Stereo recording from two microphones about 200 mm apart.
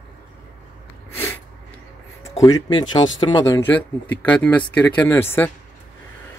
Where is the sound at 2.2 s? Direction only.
15° left (ahead or behind).